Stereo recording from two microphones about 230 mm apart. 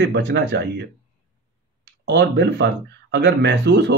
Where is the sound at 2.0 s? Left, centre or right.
Right.